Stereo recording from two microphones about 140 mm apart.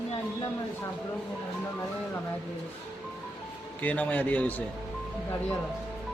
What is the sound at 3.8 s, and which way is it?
Speech, 10° left (ahead or behind).